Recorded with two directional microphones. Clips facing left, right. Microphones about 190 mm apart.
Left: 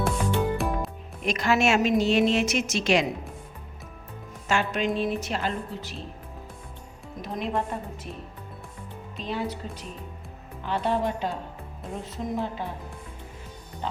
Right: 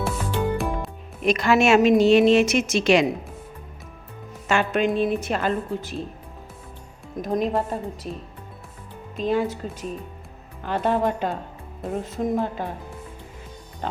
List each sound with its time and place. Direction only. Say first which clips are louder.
0.0 s music: even; centre (ahead or behind)
1.2 s a woman's voice: right 5 dB; 60° right (ahead or behind)
4.4 s a woman's voice: right 4 dB; 60° right (ahead or behind)
7.2 s a woman's voice: right 6 dB; 45° right (ahead or behind)
9.1 s a woman's voice: right 8 dB; 50° right (ahead or behind)
10.6 s a woman's voice: right 4 dB; 50° right (ahead or behind)